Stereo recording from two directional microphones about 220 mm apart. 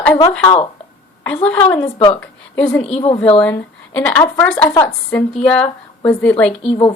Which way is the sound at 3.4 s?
5° left (ahead or behind).